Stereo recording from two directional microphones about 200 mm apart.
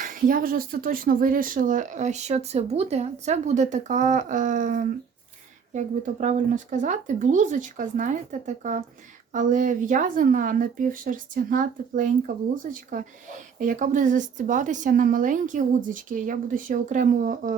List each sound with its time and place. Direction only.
0.0 s speech: 45° right (ahead or behind)